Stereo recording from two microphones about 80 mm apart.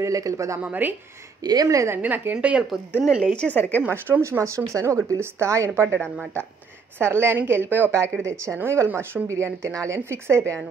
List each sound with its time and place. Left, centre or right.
0.0 s speech: right
0.6 s speech: right
1.4 s speech: right
2.0 s a woman's voice: right
3.3 s a woman's voice: left
3.8 s speech: right
4.2 s speech: right
7.0 s speech: right